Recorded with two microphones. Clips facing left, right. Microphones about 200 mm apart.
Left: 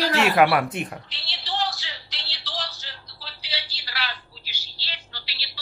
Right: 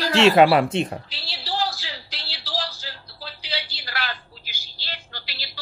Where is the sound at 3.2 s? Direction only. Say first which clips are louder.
Right 5 dB; 55° right (ahead or behind).